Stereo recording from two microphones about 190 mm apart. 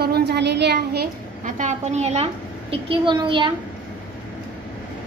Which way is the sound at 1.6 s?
40° right (ahead or behind).